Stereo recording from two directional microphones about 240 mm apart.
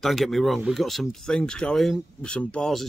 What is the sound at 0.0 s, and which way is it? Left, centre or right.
Speech, centre.